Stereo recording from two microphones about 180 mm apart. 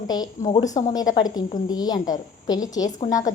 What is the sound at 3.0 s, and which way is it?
Speech, 45° left (ahead or behind).